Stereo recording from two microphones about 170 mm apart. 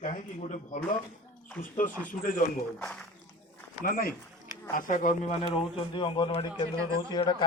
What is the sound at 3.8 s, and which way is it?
A man's voice, 55° left (ahead or behind).